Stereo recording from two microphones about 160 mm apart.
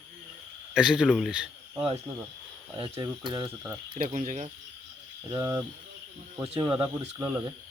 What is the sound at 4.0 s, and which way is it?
Speech, 50° right (ahead or behind).